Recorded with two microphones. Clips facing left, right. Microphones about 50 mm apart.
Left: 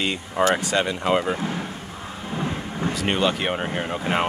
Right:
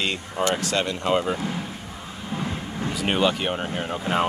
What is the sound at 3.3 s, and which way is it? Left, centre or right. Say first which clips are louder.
Speech: left 1 dB; centre.